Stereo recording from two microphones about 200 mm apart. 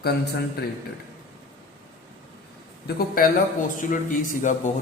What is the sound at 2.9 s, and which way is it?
A man's voice, 50° left (ahead or behind).